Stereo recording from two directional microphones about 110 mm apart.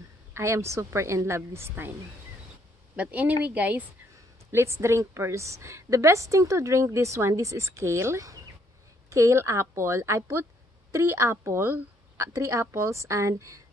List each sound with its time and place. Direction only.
0.3 s a woman's voice: 25° right (ahead or behind)
3.0 s speech: 15° right (ahead or behind)
4.5 s a woman's voice: 25° right (ahead or behind)